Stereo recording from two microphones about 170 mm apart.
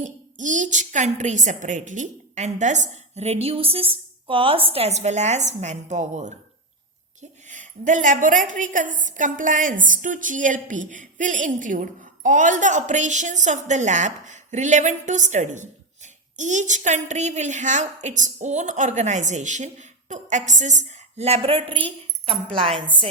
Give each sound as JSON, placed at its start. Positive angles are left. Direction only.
{"t": 0.0, "sound": "a woman's voice", "side_deg": -50}